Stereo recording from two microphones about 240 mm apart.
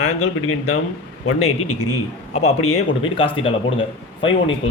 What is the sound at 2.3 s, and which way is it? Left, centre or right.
A man's voice, left.